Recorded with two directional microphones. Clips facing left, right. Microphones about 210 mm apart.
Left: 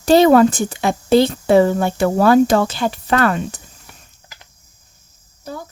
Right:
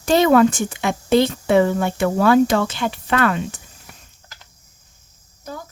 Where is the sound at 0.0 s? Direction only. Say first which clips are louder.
Left 3 dB; 35° left (ahead or behind).